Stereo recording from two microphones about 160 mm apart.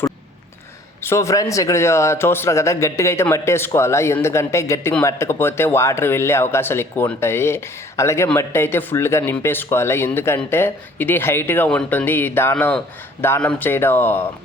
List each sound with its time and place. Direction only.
1.0 s a man's voice: 15° left (ahead or behind)